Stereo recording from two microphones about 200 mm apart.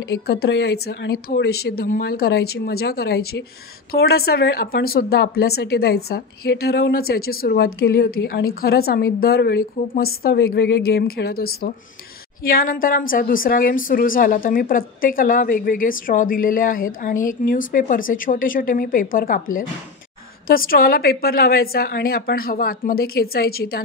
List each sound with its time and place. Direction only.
0.1 s speech: 55° left (ahead or behind)